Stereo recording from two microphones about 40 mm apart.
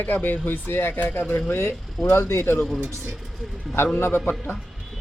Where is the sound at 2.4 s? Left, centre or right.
Left.